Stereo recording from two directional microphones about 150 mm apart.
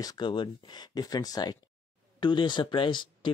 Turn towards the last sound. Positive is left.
turn(degrees=30)  # may be behind; listen again after turning